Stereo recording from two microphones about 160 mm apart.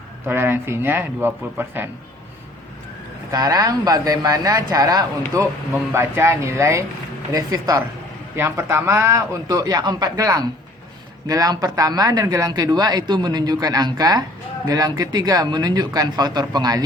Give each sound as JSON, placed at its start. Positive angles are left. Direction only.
{"t": 0.3, "sound": "speech", "side_deg": -15}
{"t": 3.3, "sound": "speech", "side_deg": -25}